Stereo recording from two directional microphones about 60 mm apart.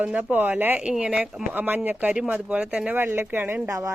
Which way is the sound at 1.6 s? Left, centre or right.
Right.